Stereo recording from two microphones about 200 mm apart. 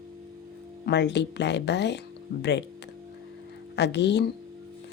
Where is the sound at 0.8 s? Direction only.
60° left (ahead or behind).